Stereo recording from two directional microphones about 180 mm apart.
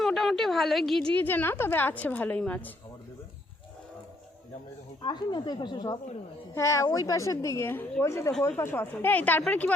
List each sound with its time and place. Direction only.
0.0 s a woman's voice: centre (ahead or behind)
5.0 s a woman's voice: 25° left (ahead or behind); by 9.7 s 10° left (ahead or behind)